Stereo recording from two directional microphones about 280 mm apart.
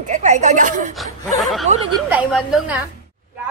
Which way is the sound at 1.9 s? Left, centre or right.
Centre.